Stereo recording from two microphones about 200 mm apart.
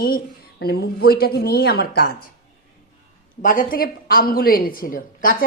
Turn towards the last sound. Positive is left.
turn(degrees=45)  # may be behind; listen again after turning